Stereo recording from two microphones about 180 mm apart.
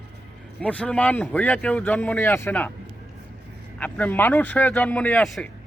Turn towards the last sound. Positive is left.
turn(degrees=5)  # may be behind; listen again after turning